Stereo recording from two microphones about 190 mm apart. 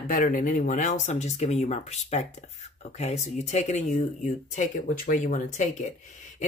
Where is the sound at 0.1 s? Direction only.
45° left (ahead or behind).